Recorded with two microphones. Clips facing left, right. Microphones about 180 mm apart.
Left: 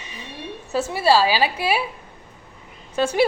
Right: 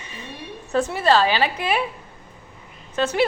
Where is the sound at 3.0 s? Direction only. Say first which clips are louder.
Left 1 dB; 10° left (ahead or behind).